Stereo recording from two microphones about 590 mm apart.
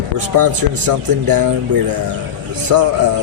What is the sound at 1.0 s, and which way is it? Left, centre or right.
Speech, right.